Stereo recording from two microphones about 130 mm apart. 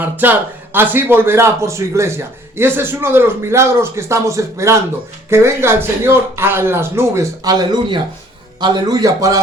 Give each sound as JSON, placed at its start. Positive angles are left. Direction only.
{"t": 0.0, "sound": "a man's voice", "side_deg": -15}